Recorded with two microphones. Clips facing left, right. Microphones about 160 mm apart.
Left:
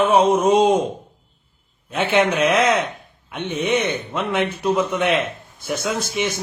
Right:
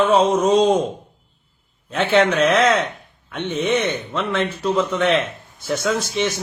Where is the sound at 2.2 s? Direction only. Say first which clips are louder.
Right 1 dB; 10° left (ahead or behind).